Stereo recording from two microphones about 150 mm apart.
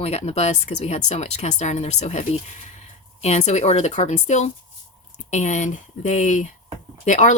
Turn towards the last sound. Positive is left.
turn(degrees=55)  # may be behind; listen again after turning